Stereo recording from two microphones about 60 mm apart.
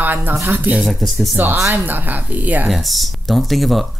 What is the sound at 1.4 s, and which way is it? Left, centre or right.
A woman's voice, right.